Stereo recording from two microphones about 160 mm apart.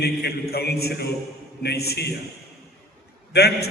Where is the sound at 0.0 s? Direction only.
85° left.